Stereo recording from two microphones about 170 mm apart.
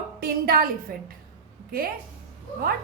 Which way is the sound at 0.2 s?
65° right (ahead or behind).